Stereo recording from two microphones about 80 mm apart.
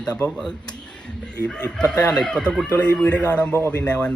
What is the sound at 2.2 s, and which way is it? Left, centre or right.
Speech, centre.